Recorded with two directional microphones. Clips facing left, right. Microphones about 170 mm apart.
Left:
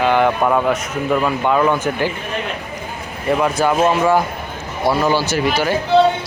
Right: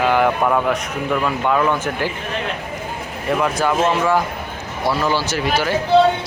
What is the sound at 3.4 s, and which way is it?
Speech, 10° left (ahead or behind).